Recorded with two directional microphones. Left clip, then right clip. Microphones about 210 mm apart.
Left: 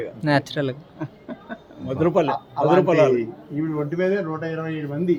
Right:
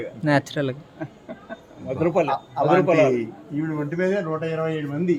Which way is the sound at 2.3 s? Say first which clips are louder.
Left 1 dB; 15° right (ahead or behind).